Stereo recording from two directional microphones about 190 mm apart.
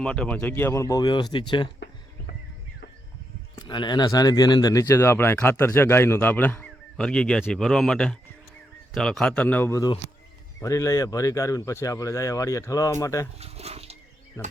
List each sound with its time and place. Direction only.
0.0 s speech: 5° left (ahead or behind); by 1.7 s 25° left (ahead or behind)
3.5 s speech: 25° left (ahead or behind)
13.4 s speech: 35° right (ahead or behind)
14.4 s speech: 15° left (ahead or behind)